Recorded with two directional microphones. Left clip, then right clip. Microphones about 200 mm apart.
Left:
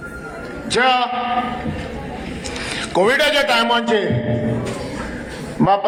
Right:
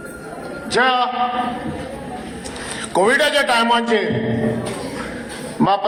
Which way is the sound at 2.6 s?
50° left (ahead or behind).